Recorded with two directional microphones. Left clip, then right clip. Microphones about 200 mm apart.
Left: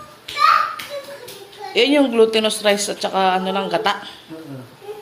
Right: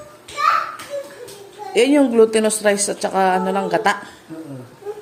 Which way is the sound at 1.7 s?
30° right (ahead or behind).